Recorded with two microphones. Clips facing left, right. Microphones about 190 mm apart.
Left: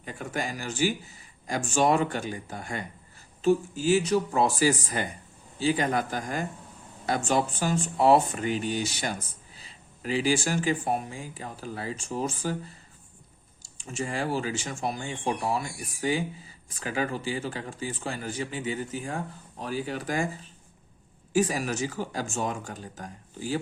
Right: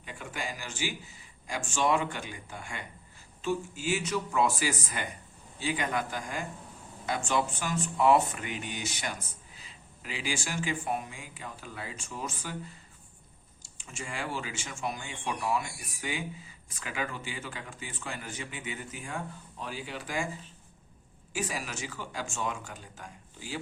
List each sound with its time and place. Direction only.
0.0 s speech: 40° left (ahead or behind)
13.6 s speech: 35° left (ahead or behind)
21.3 s speech: 40° left (ahead or behind)